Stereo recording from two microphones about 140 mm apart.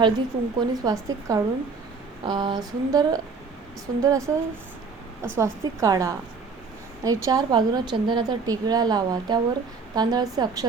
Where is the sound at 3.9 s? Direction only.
30° right (ahead or behind).